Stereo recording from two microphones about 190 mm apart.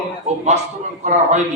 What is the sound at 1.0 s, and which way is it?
Speech, 40° right (ahead or behind).